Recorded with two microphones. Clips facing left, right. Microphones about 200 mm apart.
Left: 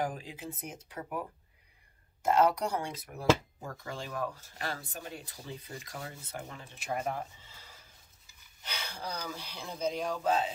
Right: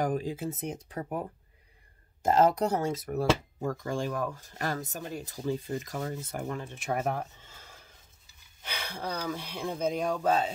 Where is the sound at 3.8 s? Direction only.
45° right (ahead or behind).